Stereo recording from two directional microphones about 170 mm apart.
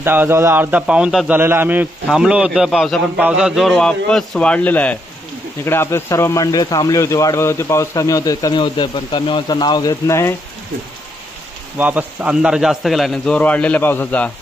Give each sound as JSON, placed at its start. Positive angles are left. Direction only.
{"t": 0.0, "sound": "a man's voice", "side_deg": -10}
{"t": 11.8, "sound": "a man's voice", "side_deg": -10}